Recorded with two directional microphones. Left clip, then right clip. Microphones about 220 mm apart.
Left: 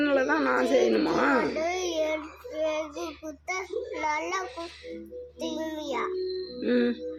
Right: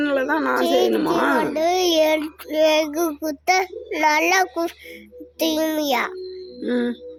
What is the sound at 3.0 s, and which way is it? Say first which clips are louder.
Speech: right 13 dB; 90° right.